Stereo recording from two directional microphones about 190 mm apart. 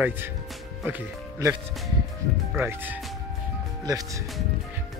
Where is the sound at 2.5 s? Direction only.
10° right (ahead or behind).